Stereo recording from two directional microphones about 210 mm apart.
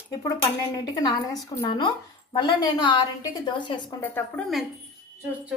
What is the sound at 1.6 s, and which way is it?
A woman's voice, 25° left (ahead or behind).